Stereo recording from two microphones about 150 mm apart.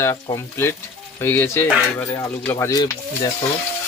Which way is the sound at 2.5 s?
25° left (ahead or behind).